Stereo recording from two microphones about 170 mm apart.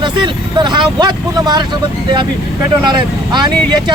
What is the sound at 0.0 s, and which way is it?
Speech, 25° right (ahead or behind).